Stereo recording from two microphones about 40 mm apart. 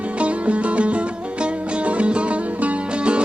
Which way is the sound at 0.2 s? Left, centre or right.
Right.